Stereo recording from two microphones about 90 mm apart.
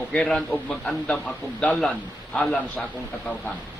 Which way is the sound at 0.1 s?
10° left (ahead or behind).